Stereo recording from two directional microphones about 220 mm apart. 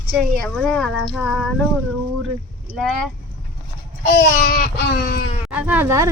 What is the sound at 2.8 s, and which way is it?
Speech, centre (ahead or behind).